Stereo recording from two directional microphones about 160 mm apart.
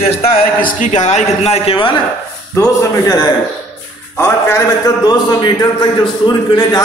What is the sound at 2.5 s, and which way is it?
Speech, 20° left (ahead or behind).